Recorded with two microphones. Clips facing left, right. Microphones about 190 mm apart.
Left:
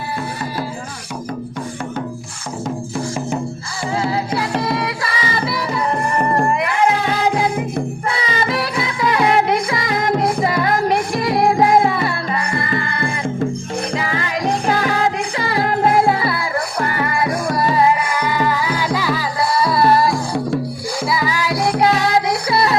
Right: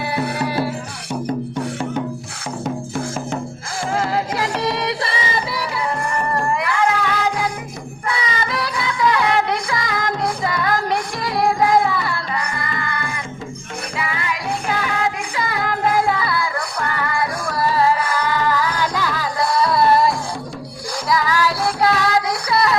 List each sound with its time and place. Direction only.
0.0 s music: 70° right (ahead or behind)
4.6 s music: 30° right (ahead or behind)
6.5 s music: 20° left (ahead or behind); by 20.1 s centre (ahead or behind)
21.1 s music: 10° left (ahead or behind); by 22.8 s 25° left (ahead or behind)